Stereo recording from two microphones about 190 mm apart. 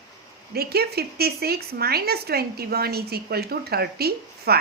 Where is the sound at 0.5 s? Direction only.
55° right (ahead or behind).